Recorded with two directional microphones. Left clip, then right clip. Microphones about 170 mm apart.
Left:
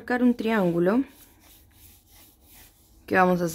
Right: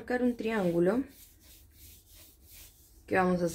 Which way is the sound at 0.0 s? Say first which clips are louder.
Left 6 dB; 35° left (ahead or behind).